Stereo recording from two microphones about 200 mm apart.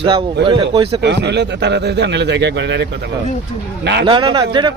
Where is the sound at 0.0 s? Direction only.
25° right (ahead or behind).